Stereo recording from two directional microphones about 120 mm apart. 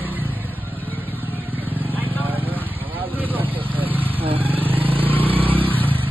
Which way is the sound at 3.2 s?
15° right (ahead or behind).